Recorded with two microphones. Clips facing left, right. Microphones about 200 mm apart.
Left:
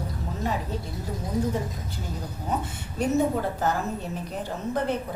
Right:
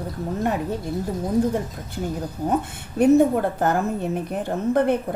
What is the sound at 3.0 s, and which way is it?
A woman's voice, 55° right (ahead or behind).